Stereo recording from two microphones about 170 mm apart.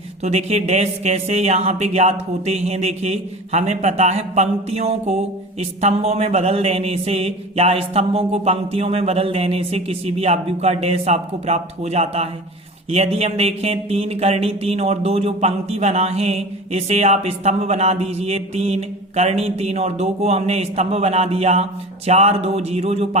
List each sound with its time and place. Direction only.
0.2 s speech: 40° right (ahead or behind)